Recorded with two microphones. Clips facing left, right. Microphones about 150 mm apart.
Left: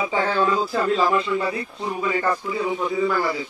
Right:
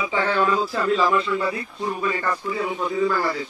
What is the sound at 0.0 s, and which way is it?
A man's voice, 30° left (ahead or behind).